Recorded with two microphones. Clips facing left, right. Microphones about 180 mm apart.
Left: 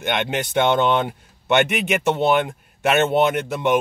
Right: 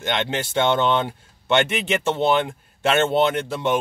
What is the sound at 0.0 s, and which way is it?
Speech, 15° left (ahead or behind).